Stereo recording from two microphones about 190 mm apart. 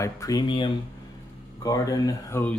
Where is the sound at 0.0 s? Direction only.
20° left (ahead or behind).